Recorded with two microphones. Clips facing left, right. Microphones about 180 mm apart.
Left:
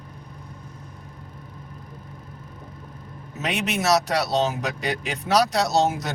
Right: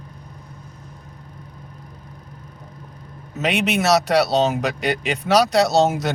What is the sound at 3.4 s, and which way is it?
Speech, 80° right.